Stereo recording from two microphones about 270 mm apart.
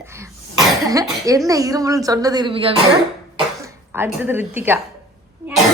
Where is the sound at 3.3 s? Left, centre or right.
Centre.